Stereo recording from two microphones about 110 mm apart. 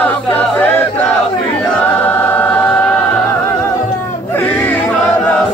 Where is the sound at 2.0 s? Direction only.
15° left (ahead or behind).